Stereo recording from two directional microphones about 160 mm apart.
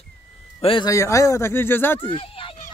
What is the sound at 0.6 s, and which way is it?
Speech, 35° left (ahead or behind).